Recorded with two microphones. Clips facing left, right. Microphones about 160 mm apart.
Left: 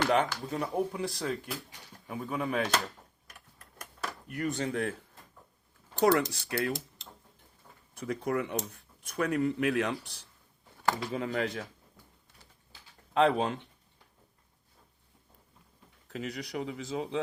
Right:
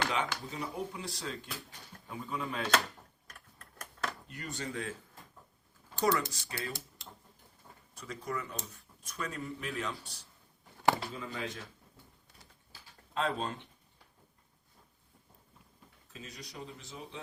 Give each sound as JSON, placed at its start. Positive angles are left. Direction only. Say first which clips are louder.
{"t": 0.1, "sound": "speech", "louder": "left 7 dB", "side_deg": 55}
{"t": 4.3, "sound": "speech", "louder": "left 9 dB", "side_deg": 60}
{"t": 6.0, "sound": "speech", "louder": "left 6 dB", "side_deg": 55}
{"t": 7.9, "sound": "speech", "louder": "left 8 dB", "side_deg": 60}
{"t": 13.1, "sound": "speech", "louder": "left 8 dB", "side_deg": 70}
{"t": 16.0, "sound": "a man's voice", "louder": "left 11 dB", "side_deg": 70}